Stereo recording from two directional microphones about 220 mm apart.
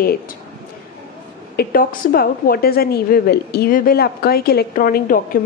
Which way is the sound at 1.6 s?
40° left (ahead or behind).